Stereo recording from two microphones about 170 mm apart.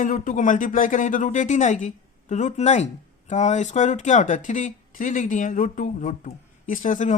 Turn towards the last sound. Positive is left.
turn(degrees=50)  # may be behind; listen again after turning